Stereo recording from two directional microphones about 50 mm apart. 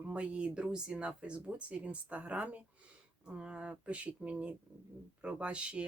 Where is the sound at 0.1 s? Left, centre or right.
Right.